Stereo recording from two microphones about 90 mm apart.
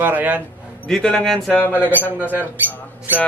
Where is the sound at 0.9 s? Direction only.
10° left (ahead or behind).